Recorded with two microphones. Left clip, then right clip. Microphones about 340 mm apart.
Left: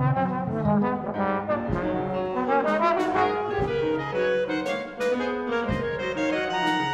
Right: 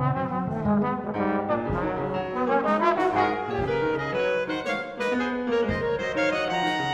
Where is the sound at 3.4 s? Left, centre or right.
Right.